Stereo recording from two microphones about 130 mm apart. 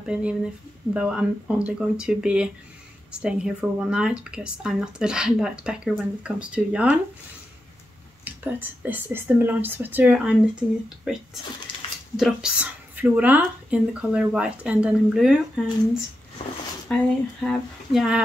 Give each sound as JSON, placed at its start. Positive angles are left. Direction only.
{"t": 0.0, "sound": "speech", "side_deg": -10}
{"t": 8.2, "sound": "speech", "side_deg": -15}
{"t": 11.7, "sound": "a sound", "side_deg": 40}
{"t": 12.2, "sound": "speech", "side_deg": -5}
{"t": 16.9, "sound": "speech", "side_deg": 10}
{"t": 17.9, "sound": "speech", "side_deg": -5}